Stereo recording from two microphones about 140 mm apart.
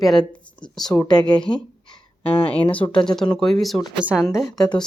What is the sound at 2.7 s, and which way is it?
A woman's voice, 10° left (ahead or behind).